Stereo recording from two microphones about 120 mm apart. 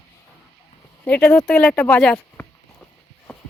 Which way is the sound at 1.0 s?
10° left (ahead or behind).